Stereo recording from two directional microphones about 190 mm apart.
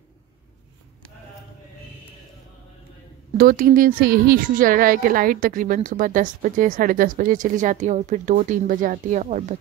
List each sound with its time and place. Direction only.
3.3 s a woman's voice: 50° right (ahead or behind)